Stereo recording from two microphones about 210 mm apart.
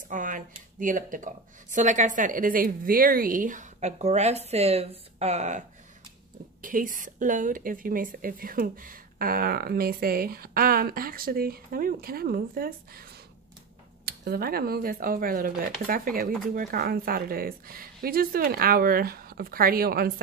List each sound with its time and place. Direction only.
0.1 s speech: 40° right (ahead or behind)
6.6 s speech: 40° right (ahead or behind)
14.0 s speech: 45° right (ahead or behind)